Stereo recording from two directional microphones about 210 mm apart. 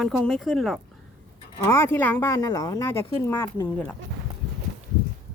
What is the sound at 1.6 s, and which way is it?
Speech, 10° left (ahead or behind).